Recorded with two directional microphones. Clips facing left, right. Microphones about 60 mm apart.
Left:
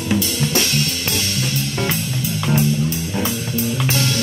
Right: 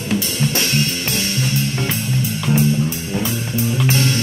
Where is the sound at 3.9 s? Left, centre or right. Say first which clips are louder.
Right 2 dB; right.